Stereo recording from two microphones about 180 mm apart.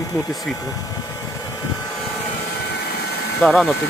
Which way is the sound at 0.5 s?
20° left (ahead or behind).